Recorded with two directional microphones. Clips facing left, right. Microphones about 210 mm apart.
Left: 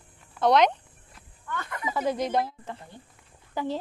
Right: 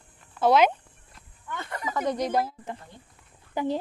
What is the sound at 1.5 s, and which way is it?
Speech, 30° right (ahead or behind).